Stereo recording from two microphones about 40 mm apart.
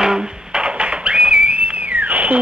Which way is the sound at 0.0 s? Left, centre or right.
Centre.